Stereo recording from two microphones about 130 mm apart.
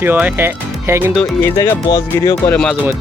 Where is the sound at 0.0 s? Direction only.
15° right (ahead or behind).